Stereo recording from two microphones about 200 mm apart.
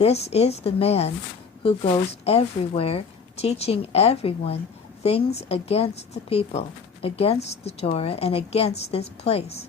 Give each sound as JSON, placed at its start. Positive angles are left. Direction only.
{"t": 0.0, "sound": "a woman's voice", "side_deg": 30}